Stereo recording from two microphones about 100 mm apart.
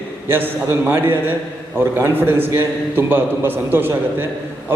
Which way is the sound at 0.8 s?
20° right (ahead or behind).